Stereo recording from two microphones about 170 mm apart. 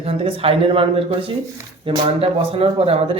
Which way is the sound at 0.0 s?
35° right (ahead or behind).